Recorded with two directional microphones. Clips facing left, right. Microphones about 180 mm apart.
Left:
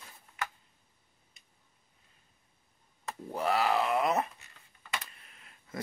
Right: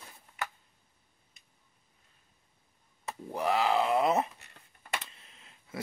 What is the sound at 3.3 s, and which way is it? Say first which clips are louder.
Speech: right 1 dB; 15° right (ahead or behind).